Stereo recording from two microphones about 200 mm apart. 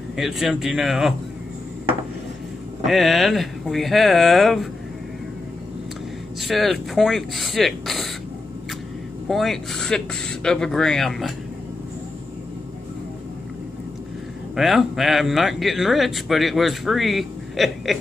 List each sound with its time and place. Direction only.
0.1 s speech: centre (ahead or behind)
2.9 s speech: centre (ahead or behind)
6.4 s speech: centre (ahead or behind)
9.3 s speech: centre (ahead or behind)
14.5 s speech: centre (ahead or behind)